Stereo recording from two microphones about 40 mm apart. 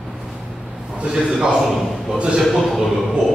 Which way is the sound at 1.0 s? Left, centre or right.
Centre.